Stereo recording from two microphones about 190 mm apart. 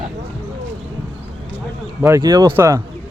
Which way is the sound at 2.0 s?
15° right (ahead or behind).